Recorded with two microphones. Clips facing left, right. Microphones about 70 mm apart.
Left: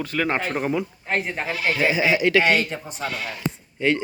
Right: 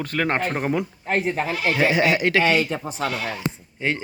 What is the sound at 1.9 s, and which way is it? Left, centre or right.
Speech, right.